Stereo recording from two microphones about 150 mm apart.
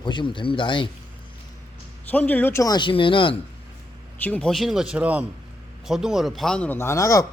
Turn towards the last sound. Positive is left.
turn(degrees=20)  # may be behind; listen again after turning